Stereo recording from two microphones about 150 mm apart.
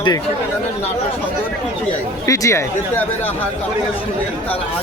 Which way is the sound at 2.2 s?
20° left (ahead or behind).